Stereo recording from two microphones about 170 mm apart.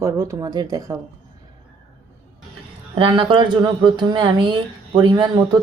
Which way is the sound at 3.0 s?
25° right (ahead or behind).